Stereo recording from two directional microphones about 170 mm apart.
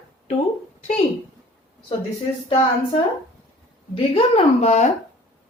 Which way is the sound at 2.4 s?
35° left (ahead or behind).